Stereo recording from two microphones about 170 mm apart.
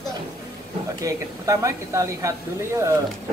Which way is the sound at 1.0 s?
20° right (ahead or behind).